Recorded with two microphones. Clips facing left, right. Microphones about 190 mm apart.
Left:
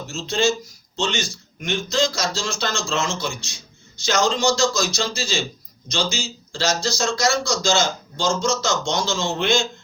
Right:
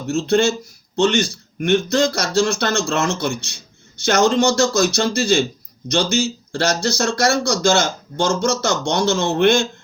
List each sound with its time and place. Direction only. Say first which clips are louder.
0.1 s speech: right 5 dB; 60° right (ahead or behind)